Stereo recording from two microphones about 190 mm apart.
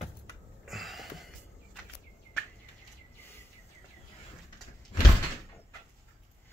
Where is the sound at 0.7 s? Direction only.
Centre (ahead or behind).